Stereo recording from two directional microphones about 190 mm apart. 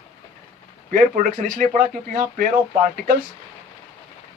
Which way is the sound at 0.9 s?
45° right (ahead or behind).